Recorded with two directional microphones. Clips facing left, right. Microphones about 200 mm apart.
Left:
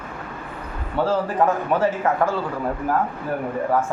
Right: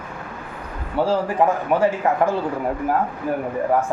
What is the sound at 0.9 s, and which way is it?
A man's voice, 10° right (ahead or behind).